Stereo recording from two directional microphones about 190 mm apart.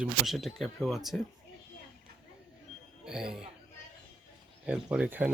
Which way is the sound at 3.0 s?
5° right (ahead or behind).